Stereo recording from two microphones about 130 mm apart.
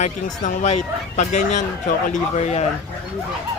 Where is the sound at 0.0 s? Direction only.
70° left (ahead or behind).